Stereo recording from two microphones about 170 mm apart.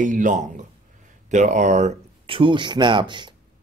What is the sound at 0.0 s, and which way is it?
A man's voice, 50° right (ahead or behind).